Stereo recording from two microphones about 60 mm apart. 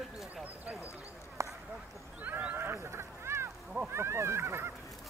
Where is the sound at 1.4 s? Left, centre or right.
Right.